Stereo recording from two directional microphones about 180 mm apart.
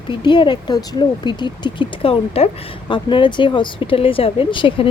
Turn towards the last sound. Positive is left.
turn(degrees=25)  # may be behind; listen again after turning